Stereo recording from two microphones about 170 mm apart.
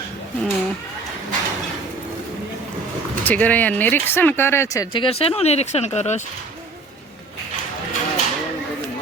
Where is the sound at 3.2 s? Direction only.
10° left (ahead or behind).